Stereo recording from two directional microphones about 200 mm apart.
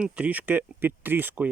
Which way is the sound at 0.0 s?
5° right (ahead or behind).